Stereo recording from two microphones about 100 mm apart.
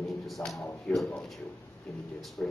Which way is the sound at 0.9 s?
5° left (ahead or behind).